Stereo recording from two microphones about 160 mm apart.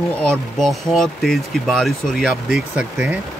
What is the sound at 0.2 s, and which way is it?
Speech, 5° left (ahead or behind).